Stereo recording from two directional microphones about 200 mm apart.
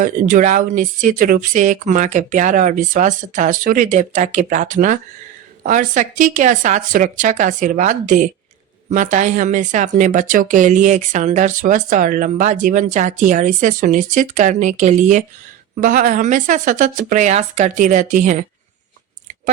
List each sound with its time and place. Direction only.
0.0 s speech: 40° right (ahead or behind)